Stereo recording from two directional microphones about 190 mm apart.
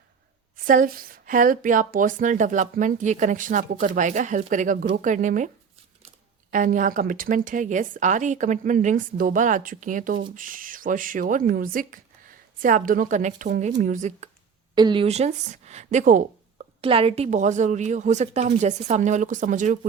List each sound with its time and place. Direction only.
0.5 s a woman's voice: 50° right (ahead or behind)
6.5 s a woman's voice: 45° right (ahead or behind)
14.8 s speech: 25° right (ahead or behind); by 16.6 s 45° right (ahead or behind)
16.8 s a woman's voice: 30° right (ahead or behind)